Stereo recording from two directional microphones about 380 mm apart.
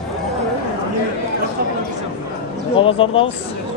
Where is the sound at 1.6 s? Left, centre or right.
Right.